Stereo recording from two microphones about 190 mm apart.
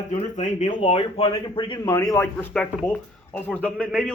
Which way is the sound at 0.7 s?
30° left (ahead or behind).